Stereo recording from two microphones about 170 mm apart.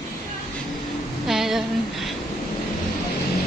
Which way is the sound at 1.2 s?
Centre (ahead or behind).